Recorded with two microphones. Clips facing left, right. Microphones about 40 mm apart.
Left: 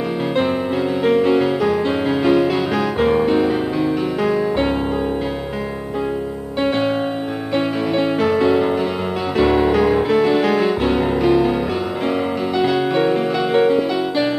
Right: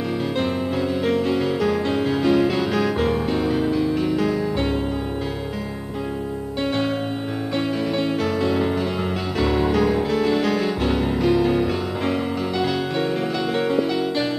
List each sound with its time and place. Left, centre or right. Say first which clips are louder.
1.0 s music: left 8 dB; left
3.1 s music: left 6 dB; left
6.6 s music: left 5 dB; left